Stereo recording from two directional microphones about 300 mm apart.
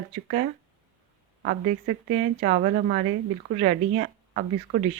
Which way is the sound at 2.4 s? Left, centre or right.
Right.